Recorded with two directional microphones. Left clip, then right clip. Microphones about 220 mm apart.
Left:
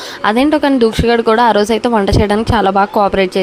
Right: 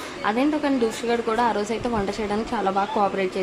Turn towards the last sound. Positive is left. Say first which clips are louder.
# left 10 dB
turn(degrees=45)  # may be behind; listen again after turning